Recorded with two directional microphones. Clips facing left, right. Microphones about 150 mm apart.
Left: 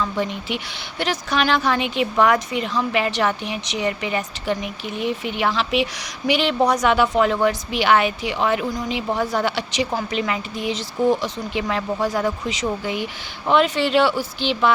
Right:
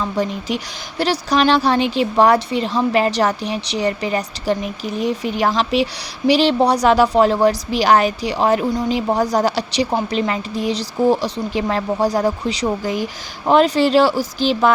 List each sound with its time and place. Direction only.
0.0 s a woman's voice: 35° right (ahead or behind)